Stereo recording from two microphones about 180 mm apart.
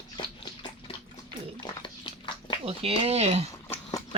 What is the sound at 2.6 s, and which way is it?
Speech, 35° right (ahead or behind).